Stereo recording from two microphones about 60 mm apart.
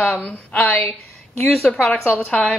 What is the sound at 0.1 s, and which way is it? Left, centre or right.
Speech, left.